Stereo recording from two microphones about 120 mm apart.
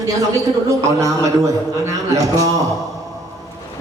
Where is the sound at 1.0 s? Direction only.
25° right (ahead or behind).